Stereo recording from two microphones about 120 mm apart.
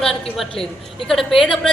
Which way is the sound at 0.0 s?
5° left (ahead or behind).